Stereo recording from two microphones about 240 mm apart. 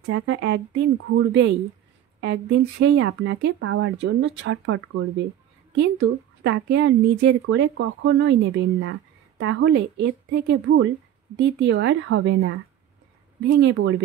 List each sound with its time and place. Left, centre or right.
0.0 s a woman's voice: right